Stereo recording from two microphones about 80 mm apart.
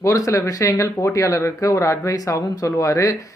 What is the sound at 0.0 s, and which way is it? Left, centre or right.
Speech, left.